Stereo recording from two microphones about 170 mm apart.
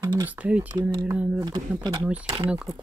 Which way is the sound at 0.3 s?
10° right (ahead or behind).